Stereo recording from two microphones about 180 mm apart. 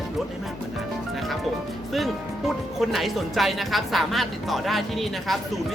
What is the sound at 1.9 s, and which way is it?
Speech, centre (ahead or behind).